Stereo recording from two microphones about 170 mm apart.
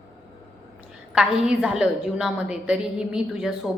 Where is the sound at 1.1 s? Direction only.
5° right (ahead or behind).